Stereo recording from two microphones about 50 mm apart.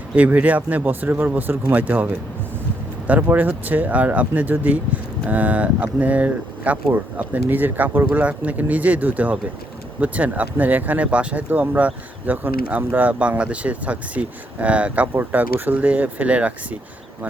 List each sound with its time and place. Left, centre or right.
0.2 s speech: right